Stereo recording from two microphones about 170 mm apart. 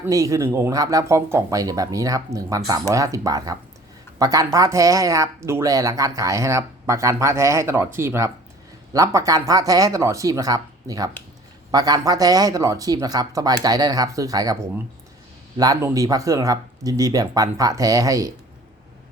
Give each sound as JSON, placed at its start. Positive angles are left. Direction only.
{"t": 0.0, "sound": "speech", "side_deg": -20}